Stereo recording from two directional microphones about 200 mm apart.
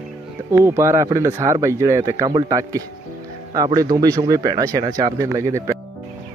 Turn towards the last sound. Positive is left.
turn(degrees=-15)  # may be behind; listen again after turning